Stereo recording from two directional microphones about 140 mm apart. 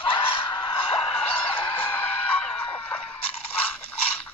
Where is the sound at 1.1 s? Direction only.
10° left (ahead or behind).